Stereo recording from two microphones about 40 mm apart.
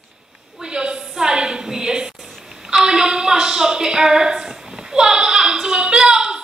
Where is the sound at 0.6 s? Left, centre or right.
Right.